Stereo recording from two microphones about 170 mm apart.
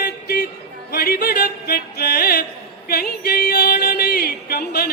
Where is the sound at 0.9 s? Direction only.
65° left (ahead or behind).